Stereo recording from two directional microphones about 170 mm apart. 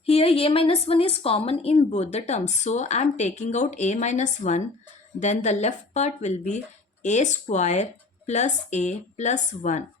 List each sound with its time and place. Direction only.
0.0 s a woman's voice: 35° left (ahead or behind)